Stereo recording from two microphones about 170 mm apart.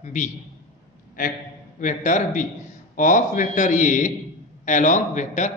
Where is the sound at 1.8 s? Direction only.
50° left (ahead or behind).